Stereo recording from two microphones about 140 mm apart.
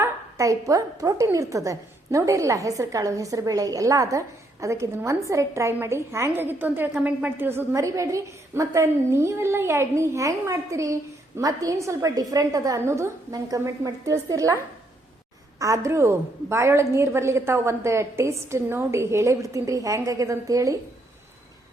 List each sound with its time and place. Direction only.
0.0 s a woman's voice: 25° right (ahead or behind)